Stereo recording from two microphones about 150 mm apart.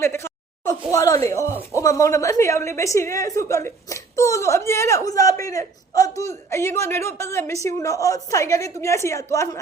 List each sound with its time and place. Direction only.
0.0 s a woman's voice: 15° left (ahead or behind)